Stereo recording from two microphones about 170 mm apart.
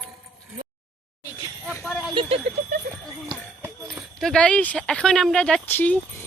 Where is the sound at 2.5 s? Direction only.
45° right (ahead or behind).